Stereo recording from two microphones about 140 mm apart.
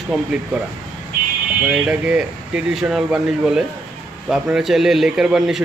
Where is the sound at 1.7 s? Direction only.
10° right (ahead or behind).